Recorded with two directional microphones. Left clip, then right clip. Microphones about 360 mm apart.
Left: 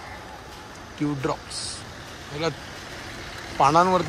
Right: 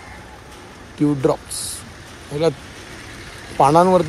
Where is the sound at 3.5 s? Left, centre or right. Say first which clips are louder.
Right 5 dB; centre.